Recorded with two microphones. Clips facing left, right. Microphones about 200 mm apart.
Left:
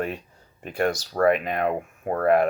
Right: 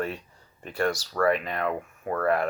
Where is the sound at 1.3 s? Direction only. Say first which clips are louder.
Left 4 dB; 45° left (ahead or behind).